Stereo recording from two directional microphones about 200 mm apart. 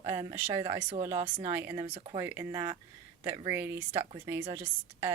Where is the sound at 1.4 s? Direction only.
15° right (ahead or behind).